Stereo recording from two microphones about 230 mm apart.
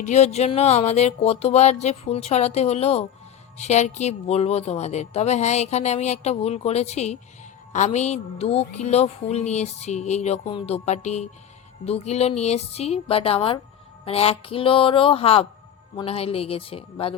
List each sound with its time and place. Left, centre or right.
0.0 s a woman's voice: left